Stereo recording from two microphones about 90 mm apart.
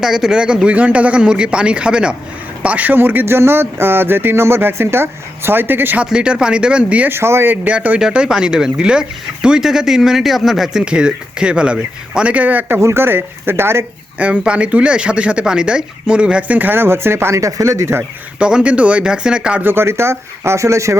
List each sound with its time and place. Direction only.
0.0 s speech: 5° right (ahead or behind); by 6.1 s 20° right (ahead or behind)
6.1 s speech: 10° right (ahead or behind)
7.1 s speech: 30° right (ahead or behind)
14.2 s speech: 15° right (ahead or behind); by 18.0 s 30° right (ahead or behind)
18.3 s speech: 10° right (ahead or behind)
19.6 s speech: 25° right (ahead or behind)